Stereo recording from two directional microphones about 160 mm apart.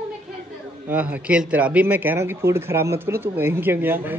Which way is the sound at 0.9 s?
10° right (ahead or behind).